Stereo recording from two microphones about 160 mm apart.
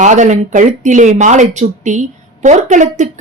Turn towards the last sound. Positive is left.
turn(degrees=-50)  # may be behind; listen again after turning